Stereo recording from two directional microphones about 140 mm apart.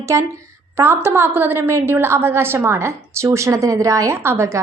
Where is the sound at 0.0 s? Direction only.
20° right (ahead or behind).